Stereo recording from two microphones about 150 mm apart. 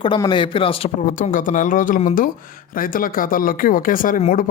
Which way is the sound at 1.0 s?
65° left (ahead or behind).